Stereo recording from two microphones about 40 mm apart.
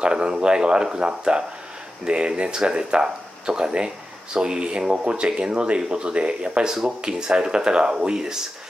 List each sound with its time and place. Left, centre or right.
0.0 s speech: right
6.7 s speech: centre